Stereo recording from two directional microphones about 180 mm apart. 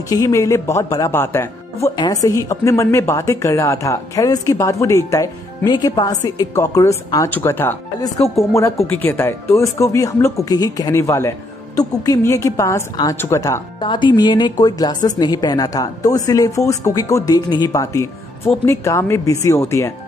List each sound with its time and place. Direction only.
0.1 s a woman's voice: 20° left (ahead or behind)